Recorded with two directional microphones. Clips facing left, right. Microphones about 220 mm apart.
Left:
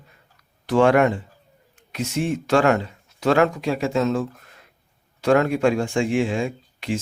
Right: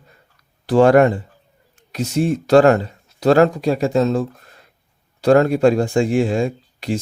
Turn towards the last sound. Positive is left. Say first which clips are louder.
# right 3 dB
turn(degrees=-40)  # may be behind; listen again after turning